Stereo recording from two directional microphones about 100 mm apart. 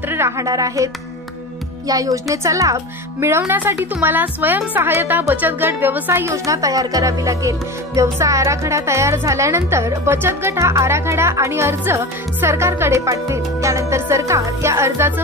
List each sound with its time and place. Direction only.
0.1 s speech: 30° right (ahead or behind)
1.9 s a woman's voice: 35° right (ahead or behind)